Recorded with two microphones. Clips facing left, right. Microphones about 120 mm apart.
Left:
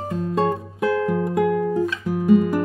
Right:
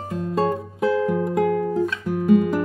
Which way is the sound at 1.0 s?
Centre (ahead or behind).